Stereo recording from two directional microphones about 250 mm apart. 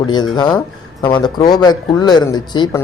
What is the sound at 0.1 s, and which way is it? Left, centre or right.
Speech, centre.